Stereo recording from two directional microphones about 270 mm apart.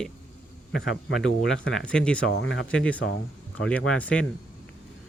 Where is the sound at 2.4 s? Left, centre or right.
Left.